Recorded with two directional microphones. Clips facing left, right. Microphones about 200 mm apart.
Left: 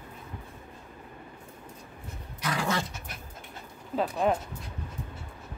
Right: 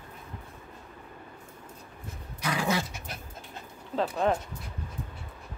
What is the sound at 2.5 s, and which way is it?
Dog, 10° right (ahead or behind).